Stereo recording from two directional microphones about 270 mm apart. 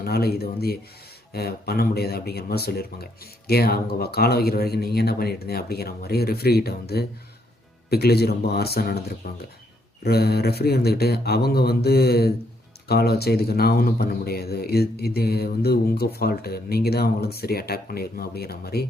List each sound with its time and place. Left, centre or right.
0.0 s speech: left